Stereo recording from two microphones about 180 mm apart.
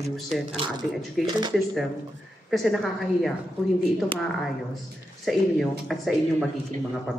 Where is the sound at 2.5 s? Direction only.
Centre (ahead or behind).